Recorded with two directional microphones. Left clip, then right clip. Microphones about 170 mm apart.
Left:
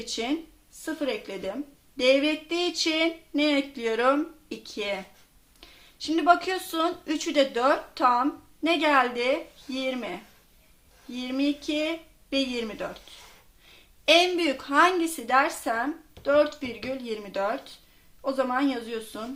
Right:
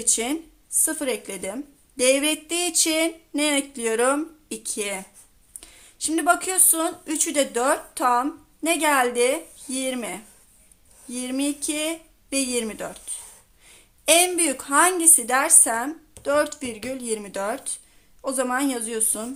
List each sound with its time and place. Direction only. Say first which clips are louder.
0.0 s a woman's voice: right 4 dB; 30° right (ahead or behind)
14.0 s a woman's voice: right 1 dB; 30° right (ahead or behind)